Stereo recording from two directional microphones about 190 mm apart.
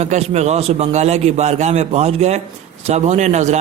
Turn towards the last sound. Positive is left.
turn(degrees=-35)  # may be behind; listen again after turning